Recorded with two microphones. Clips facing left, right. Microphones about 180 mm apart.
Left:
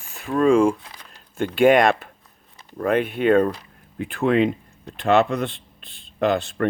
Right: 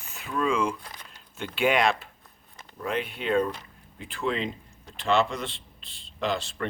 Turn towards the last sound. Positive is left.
turn(degrees=55)  # may be behind; listen again after turning